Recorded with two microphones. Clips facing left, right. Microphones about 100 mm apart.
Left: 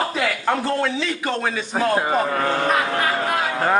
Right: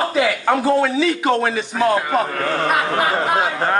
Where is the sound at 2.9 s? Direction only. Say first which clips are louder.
Right 3 dB; 35° right (ahead or behind).